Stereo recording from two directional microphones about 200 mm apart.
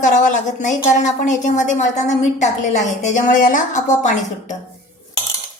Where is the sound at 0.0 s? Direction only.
40° left (ahead or behind).